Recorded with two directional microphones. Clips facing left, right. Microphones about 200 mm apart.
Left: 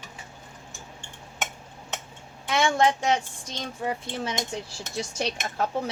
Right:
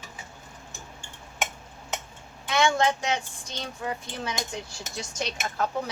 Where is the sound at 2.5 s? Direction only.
30° left (ahead or behind).